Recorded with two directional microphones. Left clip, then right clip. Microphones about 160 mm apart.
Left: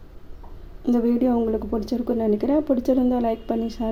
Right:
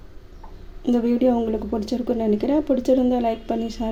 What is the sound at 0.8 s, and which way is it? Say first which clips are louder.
Speech: right 2 dB; 5° right (ahead or behind).